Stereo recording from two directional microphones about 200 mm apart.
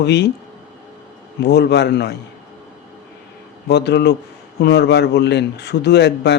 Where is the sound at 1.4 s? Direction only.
55° left (ahead or behind).